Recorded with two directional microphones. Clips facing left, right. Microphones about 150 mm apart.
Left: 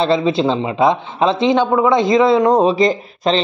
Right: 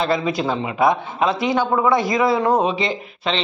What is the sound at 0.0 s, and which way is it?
A man's voice, 25° left (ahead or behind).